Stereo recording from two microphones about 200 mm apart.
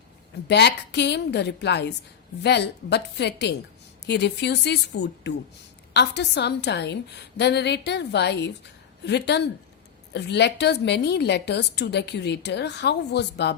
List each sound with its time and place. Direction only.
0.4 s a woman's voice: 55° left (ahead or behind)